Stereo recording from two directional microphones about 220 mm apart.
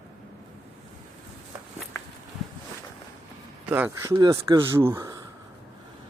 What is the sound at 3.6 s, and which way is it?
Speech, 10° right (ahead or behind).